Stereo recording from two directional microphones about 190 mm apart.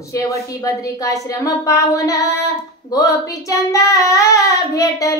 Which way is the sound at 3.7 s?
15° left (ahead or behind).